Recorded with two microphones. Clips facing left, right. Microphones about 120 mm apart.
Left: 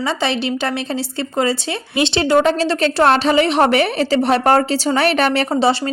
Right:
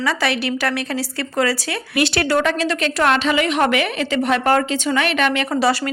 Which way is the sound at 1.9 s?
25° left (ahead or behind).